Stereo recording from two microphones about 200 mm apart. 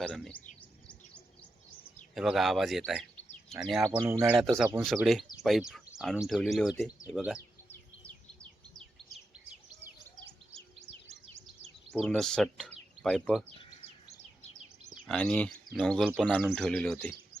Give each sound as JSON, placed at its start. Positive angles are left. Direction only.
{"t": 0.0, "sound": "speech", "side_deg": 5}
{"t": 0.6, "sound": "bird", "side_deg": 5}
{"t": 2.1, "sound": "speech", "side_deg": 0}
{"t": 4.0, "sound": "speech", "side_deg": -10}
{"t": 4.4, "sound": "speech", "side_deg": 0}
{"t": 7.3, "sound": "bird", "side_deg": 10}
{"t": 10.5, "sound": "bird", "side_deg": -30}
{"t": 11.9, "sound": "speech", "side_deg": 0}
{"t": 15.0, "sound": "speech", "side_deg": 5}